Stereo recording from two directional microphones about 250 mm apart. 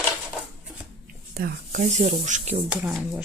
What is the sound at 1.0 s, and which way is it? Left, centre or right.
Speech, right.